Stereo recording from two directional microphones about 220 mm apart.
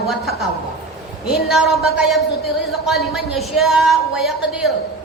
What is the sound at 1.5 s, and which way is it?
A woman's voice, centre (ahead or behind).